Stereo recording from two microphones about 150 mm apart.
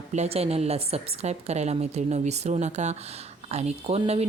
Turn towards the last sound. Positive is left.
turn(degrees=-45)  # may be behind; listen again after turning